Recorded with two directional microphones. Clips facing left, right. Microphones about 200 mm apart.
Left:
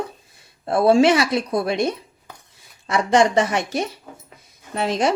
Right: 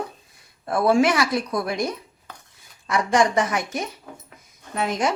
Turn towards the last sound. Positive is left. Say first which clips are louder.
# left 3 dB
turn(degrees=30)  # may be behind; listen again after turning